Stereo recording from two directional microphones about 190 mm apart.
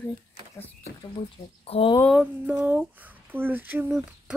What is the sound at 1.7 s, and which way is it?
Speech, 30° left (ahead or behind).